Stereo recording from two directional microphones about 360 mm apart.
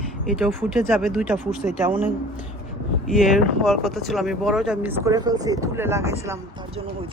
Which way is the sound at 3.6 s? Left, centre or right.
Centre.